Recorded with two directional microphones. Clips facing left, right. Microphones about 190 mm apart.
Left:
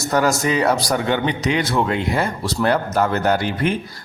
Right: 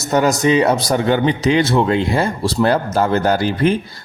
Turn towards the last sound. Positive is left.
turn(degrees=-35)  # may be behind; listen again after turning